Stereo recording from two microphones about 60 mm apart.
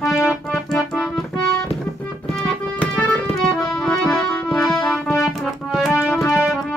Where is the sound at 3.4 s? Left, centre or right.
Centre.